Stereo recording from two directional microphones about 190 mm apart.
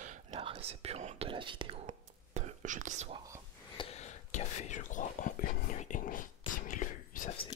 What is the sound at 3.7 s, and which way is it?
Whispering, 30° left (ahead or behind).